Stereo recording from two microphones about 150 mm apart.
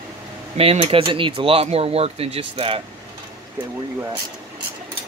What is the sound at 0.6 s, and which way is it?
Speech, 40° right (ahead or behind).